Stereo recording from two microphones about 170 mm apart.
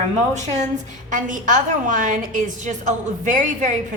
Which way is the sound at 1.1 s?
50° right (ahead or behind).